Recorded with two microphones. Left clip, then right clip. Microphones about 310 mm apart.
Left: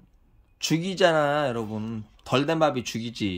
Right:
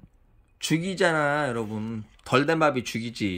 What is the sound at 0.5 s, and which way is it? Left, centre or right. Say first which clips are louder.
Speech: even; centre.